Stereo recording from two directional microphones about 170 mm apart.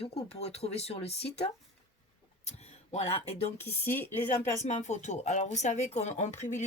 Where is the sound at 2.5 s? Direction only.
40° left (ahead or behind).